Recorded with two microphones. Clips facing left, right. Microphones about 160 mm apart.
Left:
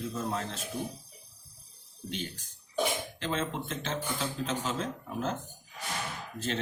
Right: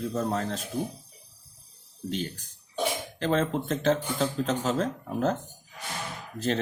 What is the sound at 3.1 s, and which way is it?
Speech, 40° right (ahead or behind).